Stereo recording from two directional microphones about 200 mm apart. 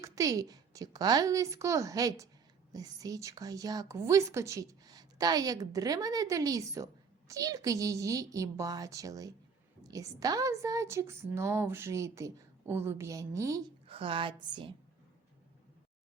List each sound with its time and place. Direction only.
0.0 s a woman's voice: 15° right (ahead or behind)
13.8 s a woman's voice: 25° right (ahead or behind)